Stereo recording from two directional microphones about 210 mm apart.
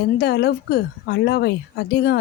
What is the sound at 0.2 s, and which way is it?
Speech, 50° left (ahead or behind).